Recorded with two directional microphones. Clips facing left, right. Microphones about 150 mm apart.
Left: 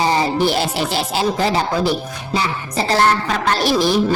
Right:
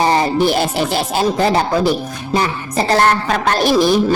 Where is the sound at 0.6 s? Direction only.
50° right (ahead or behind).